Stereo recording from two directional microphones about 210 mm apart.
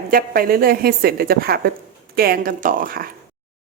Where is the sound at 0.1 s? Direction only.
45° right (ahead or behind).